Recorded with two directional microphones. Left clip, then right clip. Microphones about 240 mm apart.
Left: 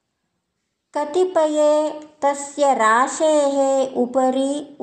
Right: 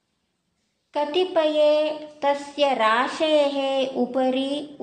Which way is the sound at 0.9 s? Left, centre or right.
Left.